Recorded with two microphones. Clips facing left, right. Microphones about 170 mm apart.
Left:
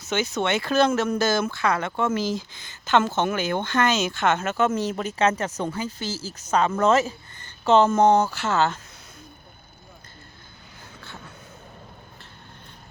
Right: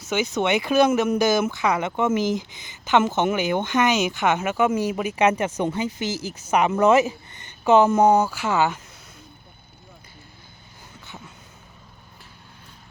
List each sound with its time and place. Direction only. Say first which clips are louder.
0.0 s speech: right 2 dB; 10° right (ahead or behind)